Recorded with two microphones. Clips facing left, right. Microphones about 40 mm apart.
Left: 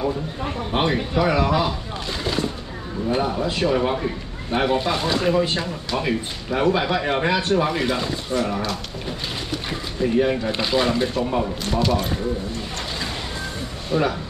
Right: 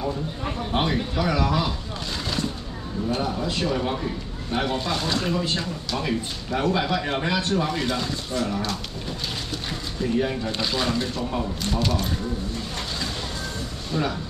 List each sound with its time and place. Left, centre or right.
0.7 s a man's voice: centre
2.2 s vehicle: centre
3.1 s a man's voice: left
13.9 s a man's voice: centre